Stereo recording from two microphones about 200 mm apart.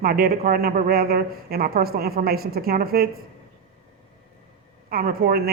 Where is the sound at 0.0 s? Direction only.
45° right (ahead or behind).